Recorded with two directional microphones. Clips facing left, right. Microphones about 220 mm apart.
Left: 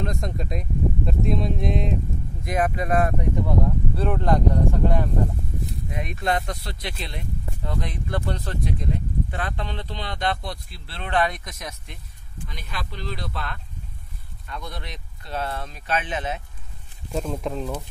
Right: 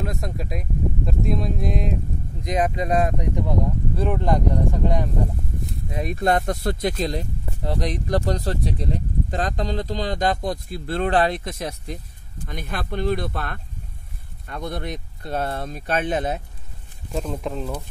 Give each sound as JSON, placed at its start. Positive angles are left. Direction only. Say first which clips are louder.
{"t": 0.0, "sound": "speech", "louder": "even", "side_deg": -5}
{"t": 2.4, "sound": "speech", "louder": "right 2 dB", "side_deg": -20}
{"t": 5.9, "sound": "speech", "louder": "right 5 dB", "side_deg": -35}
{"t": 17.1, "sound": "speech", "louder": "even", "side_deg": 0}